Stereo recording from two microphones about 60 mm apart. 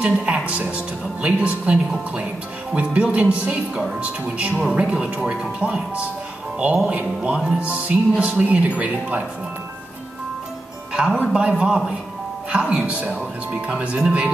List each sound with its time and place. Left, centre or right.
0.0 s speech: centre
10.9 s speech: centre